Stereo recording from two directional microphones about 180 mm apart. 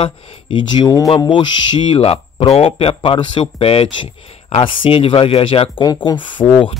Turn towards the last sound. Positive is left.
turn(degrees=25)  # may be behind; listen again after turning